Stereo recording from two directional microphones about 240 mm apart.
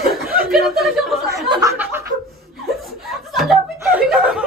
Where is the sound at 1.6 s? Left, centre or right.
Centre.